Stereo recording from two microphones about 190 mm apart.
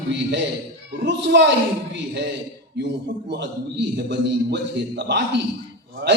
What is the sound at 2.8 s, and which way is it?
Speech, 65° right (ahead or behind).